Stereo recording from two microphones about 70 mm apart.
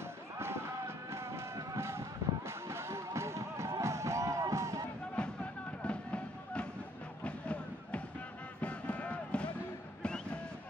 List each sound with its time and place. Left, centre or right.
0.4 s music: right
1.8 s vehicle: right
3.8 s music: right
5.1 s music: centre
7.2 s a sound: centre